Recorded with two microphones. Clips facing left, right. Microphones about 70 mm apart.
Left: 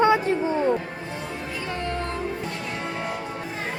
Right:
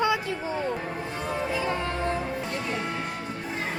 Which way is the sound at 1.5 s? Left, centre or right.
Centre.